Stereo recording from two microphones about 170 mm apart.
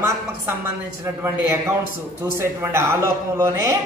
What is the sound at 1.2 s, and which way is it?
A man's voice, 15° right (ahead or behind).